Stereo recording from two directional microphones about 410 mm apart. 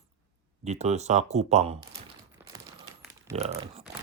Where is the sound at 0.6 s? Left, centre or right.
Centre.